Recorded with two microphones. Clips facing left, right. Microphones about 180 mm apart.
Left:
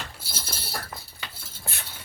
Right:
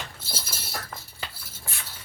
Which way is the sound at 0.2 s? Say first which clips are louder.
Right 4 dB; 10° left (ahead or behind).